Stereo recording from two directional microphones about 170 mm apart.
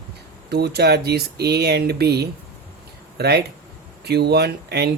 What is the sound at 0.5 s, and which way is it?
Speech, 75° right (ahead or behind).